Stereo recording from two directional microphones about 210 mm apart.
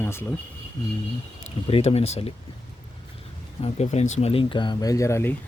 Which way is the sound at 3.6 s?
30° left (ahead or behind).